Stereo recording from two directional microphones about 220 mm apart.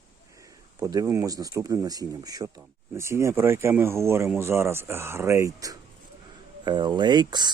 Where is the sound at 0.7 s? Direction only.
15° right (ahead or behind).